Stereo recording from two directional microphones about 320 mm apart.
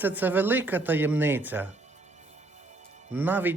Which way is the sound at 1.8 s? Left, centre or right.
Right.